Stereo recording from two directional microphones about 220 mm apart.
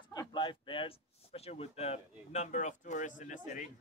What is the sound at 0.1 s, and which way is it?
Speech, 15° left (ahead or behind).